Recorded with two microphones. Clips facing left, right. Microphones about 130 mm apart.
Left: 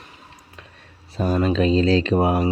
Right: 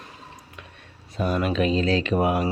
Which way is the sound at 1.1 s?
35° left (ahead or behind).